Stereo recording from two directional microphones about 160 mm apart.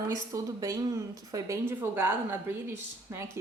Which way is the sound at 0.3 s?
20° right (ahead or behind).